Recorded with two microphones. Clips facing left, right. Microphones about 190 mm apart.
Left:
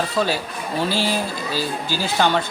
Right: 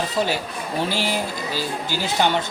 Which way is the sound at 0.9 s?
15° right (ahead or behind).